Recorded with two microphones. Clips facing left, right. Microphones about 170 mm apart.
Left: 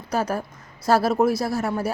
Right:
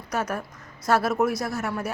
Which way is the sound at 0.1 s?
30° left (ahead or behind).